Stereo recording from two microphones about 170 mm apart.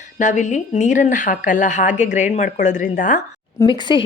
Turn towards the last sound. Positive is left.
turn(degrees=25)  # may be behind; listen again after turning